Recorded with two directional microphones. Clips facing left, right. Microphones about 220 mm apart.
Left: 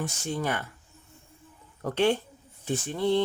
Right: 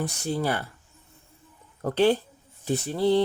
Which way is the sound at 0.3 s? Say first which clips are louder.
Right 3 dB; 35° right (ahead or behind).